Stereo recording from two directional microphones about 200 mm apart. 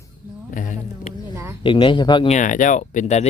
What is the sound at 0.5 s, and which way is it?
Music, 40° left (ahead or behind).